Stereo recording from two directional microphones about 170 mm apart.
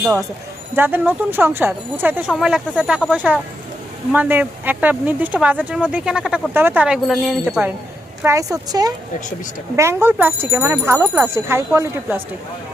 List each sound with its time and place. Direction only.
0.0 s speech: 5° right (ahead or behind)
8.2 s a woman's voice: 15° right (ahead or behind)